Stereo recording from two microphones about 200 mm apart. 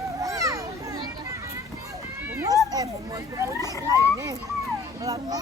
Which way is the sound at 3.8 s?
15° right (ahead or behind).